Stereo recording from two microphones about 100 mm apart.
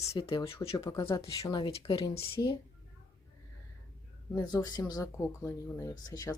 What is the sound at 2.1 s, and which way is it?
Speech, 70° left (ahead or behind).